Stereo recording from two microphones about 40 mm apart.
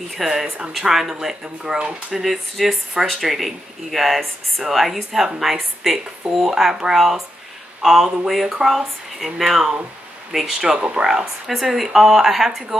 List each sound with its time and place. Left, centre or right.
0.1 s speech: centre
2.2 s speech: centre